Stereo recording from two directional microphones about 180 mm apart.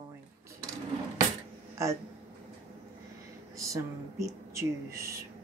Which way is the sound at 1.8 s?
15° right (ahead or behind).